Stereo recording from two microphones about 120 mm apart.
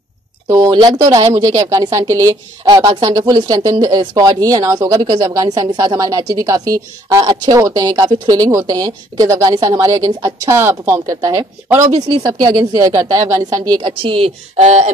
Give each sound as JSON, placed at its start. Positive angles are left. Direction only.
{"t": 0.5, "sound": "speech", "side_deg": -35}